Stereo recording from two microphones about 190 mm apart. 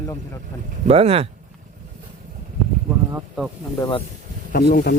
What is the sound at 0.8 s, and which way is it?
Speech, 35° right (ahead or behind).